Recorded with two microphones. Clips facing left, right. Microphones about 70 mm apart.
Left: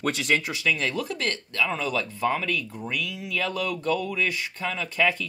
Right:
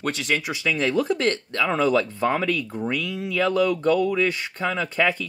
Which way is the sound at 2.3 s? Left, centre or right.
Right.